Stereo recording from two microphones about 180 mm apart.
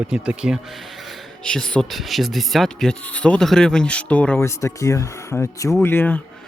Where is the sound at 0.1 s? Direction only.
5° right (ahead or behind).